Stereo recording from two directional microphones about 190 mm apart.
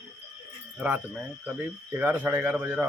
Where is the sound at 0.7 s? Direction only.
5° right (ahead or behind).